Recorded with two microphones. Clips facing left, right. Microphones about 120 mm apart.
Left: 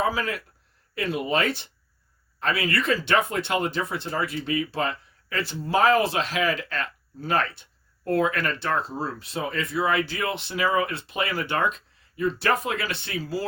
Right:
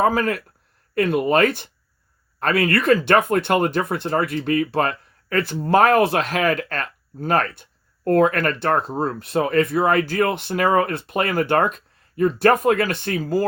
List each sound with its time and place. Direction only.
0.0 s speech: 50° right (ahead or behind)